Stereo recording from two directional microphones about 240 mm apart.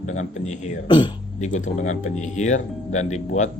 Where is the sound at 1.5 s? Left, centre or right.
Left.